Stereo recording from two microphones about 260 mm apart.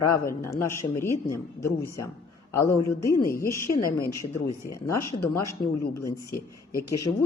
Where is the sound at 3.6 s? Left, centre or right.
Left.